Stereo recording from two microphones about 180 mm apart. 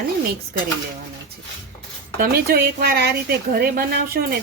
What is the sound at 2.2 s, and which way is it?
Speech, 60° right (ahead or behind).